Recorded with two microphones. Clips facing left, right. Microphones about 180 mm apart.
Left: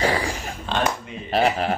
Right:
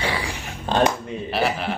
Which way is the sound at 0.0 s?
40° left (ahead or behind).